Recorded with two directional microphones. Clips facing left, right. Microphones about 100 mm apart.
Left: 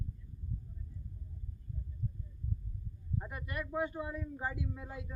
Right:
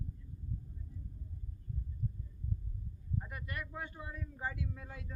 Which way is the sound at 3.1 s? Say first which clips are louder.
Left 2 dB; 20° left (ahead or behind).